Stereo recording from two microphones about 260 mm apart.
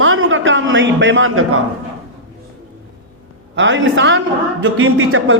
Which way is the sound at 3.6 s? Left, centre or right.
Right.